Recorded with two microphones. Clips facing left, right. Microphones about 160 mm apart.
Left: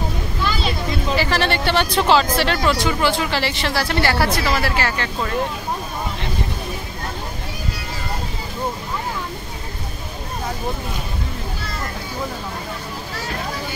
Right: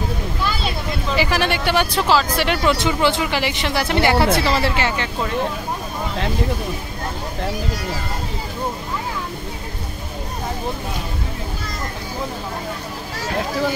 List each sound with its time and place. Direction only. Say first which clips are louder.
1.1 s speech: right 1 dB; 15° right (ahead or behind)
2.3 s speech: even; 15° right (ahead or behind)